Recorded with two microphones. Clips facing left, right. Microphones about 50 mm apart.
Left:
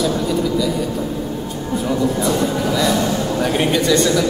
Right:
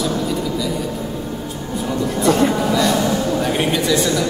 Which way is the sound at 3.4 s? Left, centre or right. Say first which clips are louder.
Left 2 dB; centre.